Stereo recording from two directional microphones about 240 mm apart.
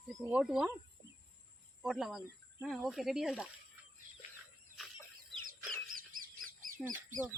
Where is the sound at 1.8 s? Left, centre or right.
Centre.